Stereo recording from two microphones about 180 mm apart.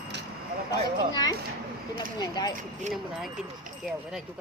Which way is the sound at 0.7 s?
20° left (ahead or behind).